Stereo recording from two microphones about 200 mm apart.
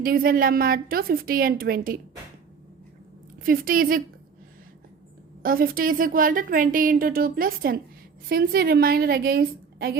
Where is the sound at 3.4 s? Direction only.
45° right (ahead or behind).